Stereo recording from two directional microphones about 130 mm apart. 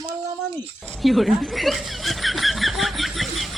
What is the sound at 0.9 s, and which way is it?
Snicker, centre (ahead or behind).